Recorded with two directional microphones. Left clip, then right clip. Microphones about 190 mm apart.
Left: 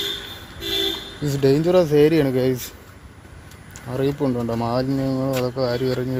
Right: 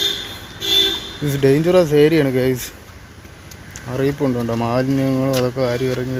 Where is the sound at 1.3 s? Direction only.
10° left (ahead or behind).